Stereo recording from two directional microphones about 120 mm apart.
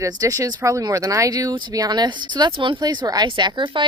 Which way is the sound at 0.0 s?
25° right (ahead or behind).